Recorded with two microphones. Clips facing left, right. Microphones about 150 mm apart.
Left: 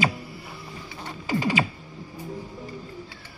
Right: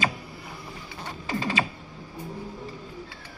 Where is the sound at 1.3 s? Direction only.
15° left (ahead or behind).